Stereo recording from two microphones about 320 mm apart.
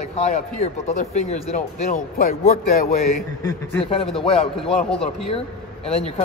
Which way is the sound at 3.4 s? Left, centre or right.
Centre.